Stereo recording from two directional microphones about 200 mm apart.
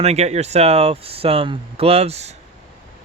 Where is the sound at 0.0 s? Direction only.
35° right (ahead or behind).